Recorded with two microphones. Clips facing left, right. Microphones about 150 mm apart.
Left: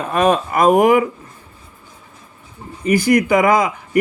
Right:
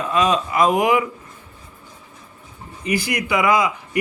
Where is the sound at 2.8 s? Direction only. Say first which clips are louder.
Left 8 dB; 45° left (ahead or behind).